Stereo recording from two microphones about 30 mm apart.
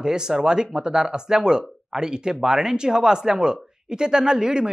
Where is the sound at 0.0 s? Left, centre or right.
Right.